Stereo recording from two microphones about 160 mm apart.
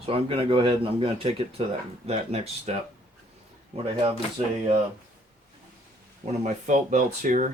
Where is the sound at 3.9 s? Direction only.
35° right (ahead or behind).